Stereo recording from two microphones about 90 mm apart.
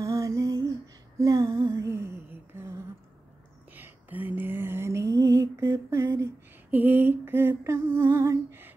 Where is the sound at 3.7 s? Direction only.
20° right (ahead or behind).